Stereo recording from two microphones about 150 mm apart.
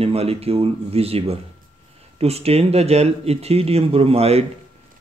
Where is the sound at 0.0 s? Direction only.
40° right (ahead or behind).